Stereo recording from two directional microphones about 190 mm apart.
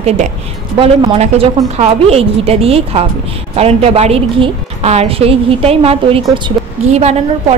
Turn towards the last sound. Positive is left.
turn(degrees=-35)  # may be behind; listen again after turning